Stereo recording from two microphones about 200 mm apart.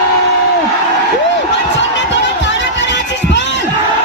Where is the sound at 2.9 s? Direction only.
60° left (ahead or behind).